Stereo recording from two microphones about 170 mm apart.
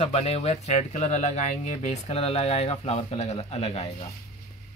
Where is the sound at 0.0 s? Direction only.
40° left (ahead or behind).